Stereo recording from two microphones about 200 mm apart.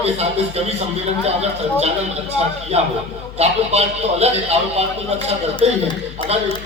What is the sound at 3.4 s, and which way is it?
Speech, 30° right (ahead or behind).